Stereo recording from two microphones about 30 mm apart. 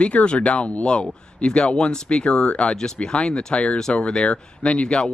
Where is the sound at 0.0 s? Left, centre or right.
Left.